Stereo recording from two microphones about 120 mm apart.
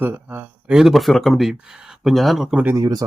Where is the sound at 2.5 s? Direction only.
15° right (ahead or behind).